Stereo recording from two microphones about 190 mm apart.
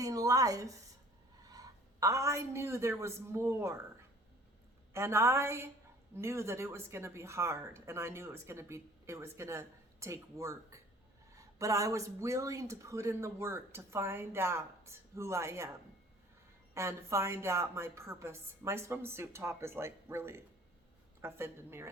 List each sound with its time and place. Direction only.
0.0 s a sound: 20° right (ahead or behind)
1.5 s a woman's voice: 20° right (ahead or behind)
4.9 s speech: 15° right (ahead or behind)
16.7 s speech: 15° right (ahead or behind)